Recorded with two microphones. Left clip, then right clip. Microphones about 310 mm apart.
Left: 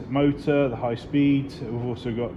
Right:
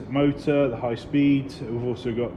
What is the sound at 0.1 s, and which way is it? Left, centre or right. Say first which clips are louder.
Speech: even; left.